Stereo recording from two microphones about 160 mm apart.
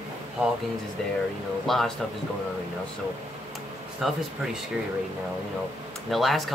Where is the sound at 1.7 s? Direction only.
Centre (ahead or behind).